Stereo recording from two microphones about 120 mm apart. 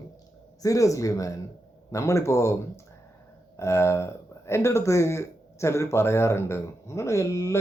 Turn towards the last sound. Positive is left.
turn(degrees=25)  # may be behind; listen again after turning